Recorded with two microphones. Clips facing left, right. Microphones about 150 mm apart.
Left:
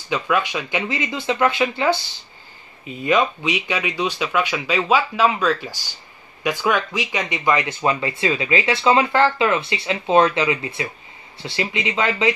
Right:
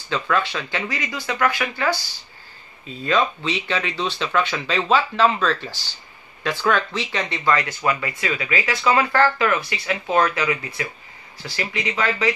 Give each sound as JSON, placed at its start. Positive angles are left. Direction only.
{"t": 0.1, "sound": "speech", "side_deg": 15}